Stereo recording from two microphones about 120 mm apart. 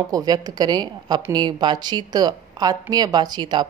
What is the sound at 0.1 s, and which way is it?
A woman's voice, 30° right (ahead or behind).